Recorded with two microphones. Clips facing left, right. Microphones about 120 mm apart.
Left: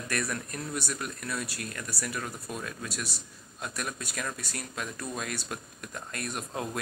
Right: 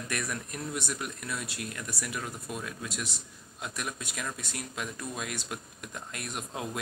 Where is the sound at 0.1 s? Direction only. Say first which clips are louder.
Left 3 dB; 15° right (ahead or behind).